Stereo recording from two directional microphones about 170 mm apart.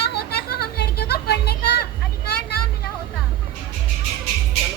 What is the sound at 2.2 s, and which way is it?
Vehicle, 65° left (ahead or behind).